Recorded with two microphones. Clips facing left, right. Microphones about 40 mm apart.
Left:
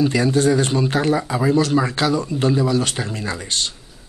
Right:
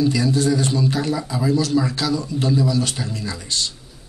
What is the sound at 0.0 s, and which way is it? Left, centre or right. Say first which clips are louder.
A man's voice: left 2 dB; left.